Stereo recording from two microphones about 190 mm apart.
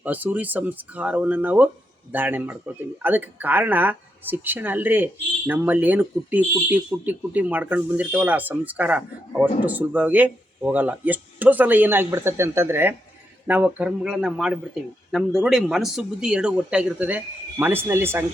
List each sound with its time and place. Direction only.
0.0 s speech: 10° right (ahead or behind)